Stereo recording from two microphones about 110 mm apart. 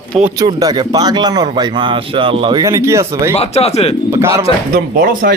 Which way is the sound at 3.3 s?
70° left (ahead or behind).